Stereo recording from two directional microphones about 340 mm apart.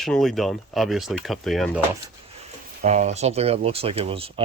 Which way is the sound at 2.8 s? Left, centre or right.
Centre.